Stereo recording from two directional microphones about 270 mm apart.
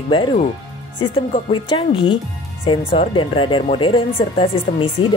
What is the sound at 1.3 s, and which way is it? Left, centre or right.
Speech, centre.